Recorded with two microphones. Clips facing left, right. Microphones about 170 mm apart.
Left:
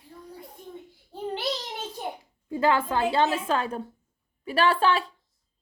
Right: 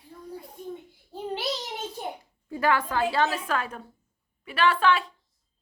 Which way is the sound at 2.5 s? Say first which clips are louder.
Left 2 dB; 25° left (ahead or behind).